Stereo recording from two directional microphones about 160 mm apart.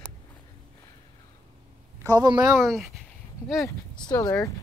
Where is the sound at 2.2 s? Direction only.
25° right (ahead or behind).